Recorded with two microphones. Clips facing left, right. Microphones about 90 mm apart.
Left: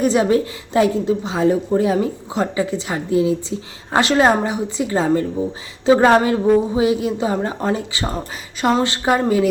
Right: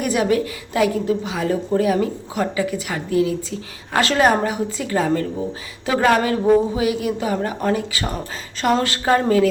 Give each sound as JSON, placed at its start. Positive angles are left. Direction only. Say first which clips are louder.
{"t": 0.0, "sound": "a woman's voice", "louder": "left 3 dB", "side_deg": 30}